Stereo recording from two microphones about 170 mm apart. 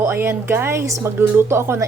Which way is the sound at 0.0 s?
15° right (ahead or behind).